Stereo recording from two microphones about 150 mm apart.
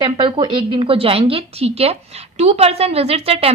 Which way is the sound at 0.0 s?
35° right (ahead or behind).